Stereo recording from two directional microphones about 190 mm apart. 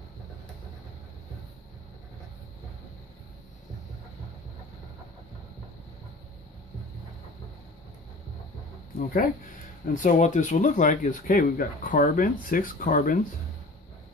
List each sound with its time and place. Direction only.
8.9 s speech: 45° left (ahead or behind)